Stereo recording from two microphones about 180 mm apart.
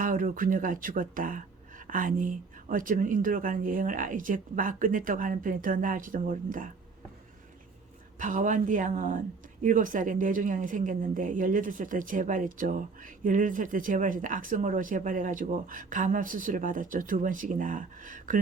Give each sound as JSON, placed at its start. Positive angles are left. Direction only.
{"t": 0.0, "sound": "a woman's voice", "side_deg": -50}
{"t": 8.2, "sound": "a woman's voice", "side_deg": -45}